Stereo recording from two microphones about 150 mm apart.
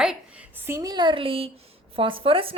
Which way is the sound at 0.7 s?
20° right (ahead or behind).